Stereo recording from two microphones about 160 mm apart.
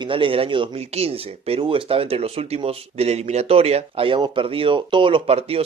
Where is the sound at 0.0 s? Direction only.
35° right (ahead or behind).